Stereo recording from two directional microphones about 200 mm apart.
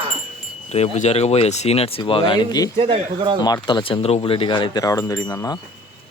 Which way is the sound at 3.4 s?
20° left (ahead or behind).